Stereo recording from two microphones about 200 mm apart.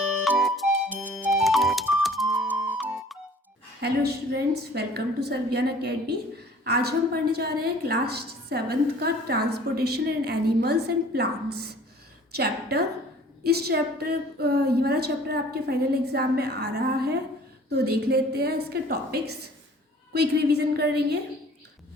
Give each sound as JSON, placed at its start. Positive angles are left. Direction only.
{"t": 0.3, "sound": "music", "side_deg": 0}
{"t": 3.8, "sound": "a woman's voice", "side_deg": -50}